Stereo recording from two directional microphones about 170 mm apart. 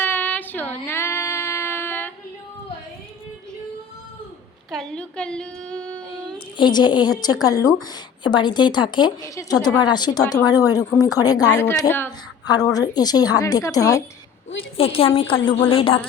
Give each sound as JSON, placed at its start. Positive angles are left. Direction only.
{"t": 0.0, "sound": "child singing", "side_deg": 10}
{"t": 4.7, "sound": "a woman's voice", "side_deg": 5}
{"t": 6.6, "sound": "speech", "side_deg": 25}
{"t": 11.6, "sound": "speech", "side_deg": 10}
{"t": 12.5, "sound": "speech", "side_deg": 20}
{"t": 14.8, "sound": "a woman's voice", "side_deg": 35}